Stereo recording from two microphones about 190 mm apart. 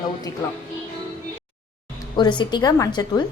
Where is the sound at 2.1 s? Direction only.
25° left (ahead or behind).